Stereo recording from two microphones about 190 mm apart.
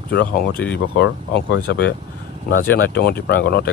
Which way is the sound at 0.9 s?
70° left (ahead or behind).